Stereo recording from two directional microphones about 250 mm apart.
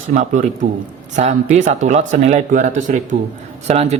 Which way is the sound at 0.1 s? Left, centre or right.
Right.